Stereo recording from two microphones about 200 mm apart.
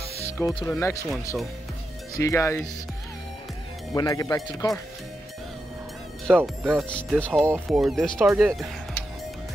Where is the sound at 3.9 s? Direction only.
15° left (ahead or behind).